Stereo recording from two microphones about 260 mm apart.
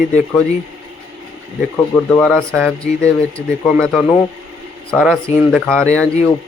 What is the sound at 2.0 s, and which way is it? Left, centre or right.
A man's voice, centre.